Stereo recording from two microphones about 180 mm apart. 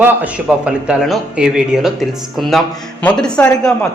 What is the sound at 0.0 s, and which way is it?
Speech, 10° right (ahead or behind).